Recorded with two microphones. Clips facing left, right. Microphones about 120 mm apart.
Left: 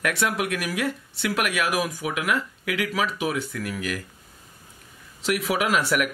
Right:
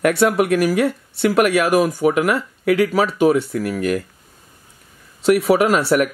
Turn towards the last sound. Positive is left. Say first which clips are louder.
# right 7 dB
turn(degrees=-40)  # may be behind; listen again after turning